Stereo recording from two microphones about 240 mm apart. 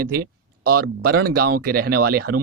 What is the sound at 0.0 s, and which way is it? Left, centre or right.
Speech, right.